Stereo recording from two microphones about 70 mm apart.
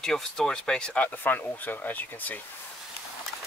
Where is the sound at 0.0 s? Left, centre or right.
Centre; by 2.3 s left.